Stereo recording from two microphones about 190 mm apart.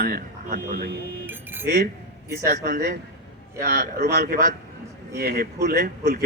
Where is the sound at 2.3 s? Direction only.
55° right (ahead or behind).